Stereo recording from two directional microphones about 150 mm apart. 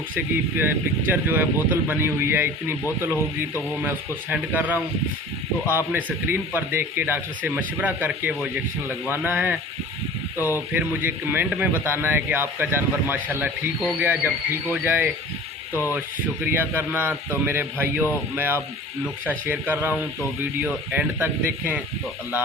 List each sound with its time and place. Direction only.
0.5 s a man's voice: 15° right (ahead or behind)
3.8 s a man's voice: 10° right (ahead or behind)
10.3 s speech: 20° left (ahead or behind)
10.7 s a man's voice: 15° right (ahead or behind)
15.7 s a sound: 20° left (ahead or behind)
16.6 s a man's voice: 15° right (ahead or behind)